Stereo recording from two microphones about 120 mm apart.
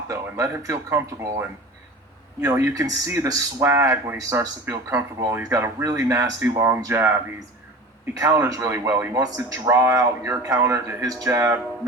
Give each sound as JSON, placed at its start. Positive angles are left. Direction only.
{"t": 0.1, "sound": "speech", "side_deg": -25}